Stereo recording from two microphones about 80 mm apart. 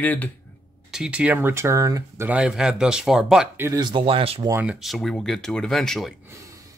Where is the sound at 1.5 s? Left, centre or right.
Right.